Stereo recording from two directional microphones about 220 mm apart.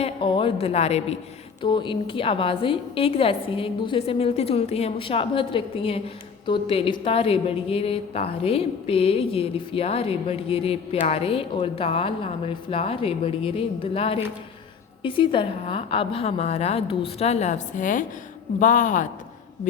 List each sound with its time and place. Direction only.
0.0 s a woman's voice: 25° left (ahead or behind)